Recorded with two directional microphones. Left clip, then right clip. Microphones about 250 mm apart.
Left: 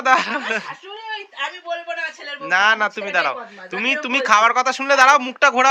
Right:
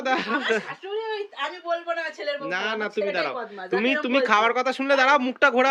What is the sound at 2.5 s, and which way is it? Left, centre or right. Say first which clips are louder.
A man's voice: left 16 dB; centre.